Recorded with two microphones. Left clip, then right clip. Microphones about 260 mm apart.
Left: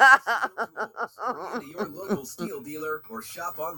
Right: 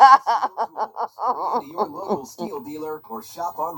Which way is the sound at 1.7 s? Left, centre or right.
Left.